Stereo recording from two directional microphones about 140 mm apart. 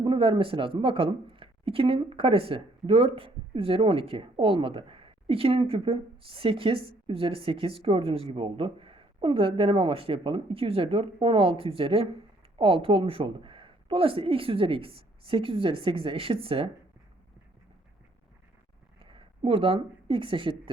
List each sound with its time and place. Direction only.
0.0 s speech: 40° right (ahead or behind)
19.1 s speech: 40° right (ahead or behind)